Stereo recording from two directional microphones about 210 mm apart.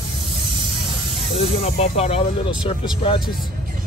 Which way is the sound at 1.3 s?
30° left (ahead or behind).